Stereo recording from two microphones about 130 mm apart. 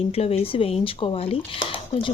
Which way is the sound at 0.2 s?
50° left (ahead or behind).